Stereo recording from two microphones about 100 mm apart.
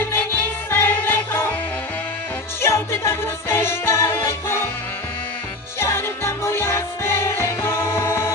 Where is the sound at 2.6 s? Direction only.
25° left (ahead or behind).